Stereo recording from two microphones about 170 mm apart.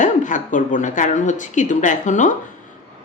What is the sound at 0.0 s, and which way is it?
Speech, 50° left (ahead or behind).